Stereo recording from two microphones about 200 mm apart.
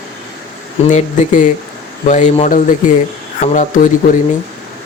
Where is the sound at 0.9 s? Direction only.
40° left (ahead or behind).